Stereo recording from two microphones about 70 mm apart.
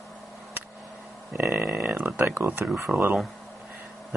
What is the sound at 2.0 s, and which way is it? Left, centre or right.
Speech, right.